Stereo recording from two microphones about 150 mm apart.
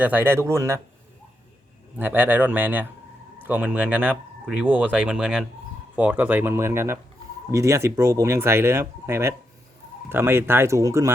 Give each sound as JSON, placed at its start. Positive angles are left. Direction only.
{"t": 0.0, "sound": "speech", "side_deg": -10}
{"t": 2.0, "sound": "speech", "side_deg": -10}